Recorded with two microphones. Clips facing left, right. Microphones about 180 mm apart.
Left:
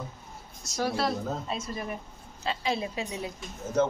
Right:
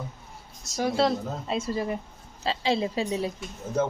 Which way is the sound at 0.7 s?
25° right (ahead or behind).